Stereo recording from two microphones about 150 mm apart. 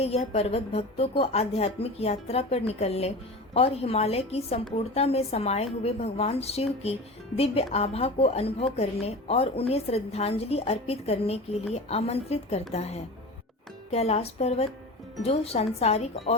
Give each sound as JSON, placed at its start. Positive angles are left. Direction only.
{"t": 0.0, "sound": "a woman's voice", "side_deg": 45}